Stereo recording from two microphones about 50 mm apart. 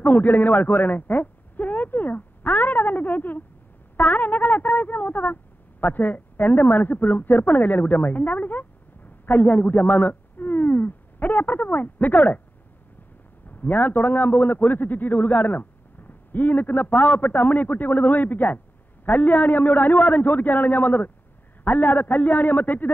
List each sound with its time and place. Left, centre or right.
0.0 s a sound: left
3.9 s speech: left
13.5 s a man's voice: left